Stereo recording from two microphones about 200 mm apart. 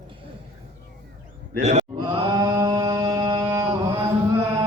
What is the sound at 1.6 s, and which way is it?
Speech, 35° right (ahead or behind).